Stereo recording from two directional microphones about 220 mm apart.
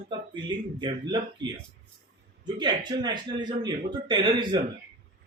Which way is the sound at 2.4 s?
20° right (ahead or behind).